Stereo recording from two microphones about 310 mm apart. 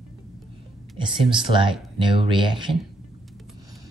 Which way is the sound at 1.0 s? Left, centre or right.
Centre.